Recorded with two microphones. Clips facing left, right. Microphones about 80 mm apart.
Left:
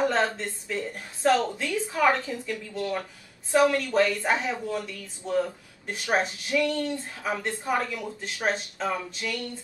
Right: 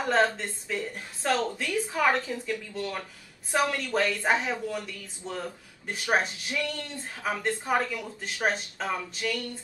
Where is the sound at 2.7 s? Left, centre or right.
Left.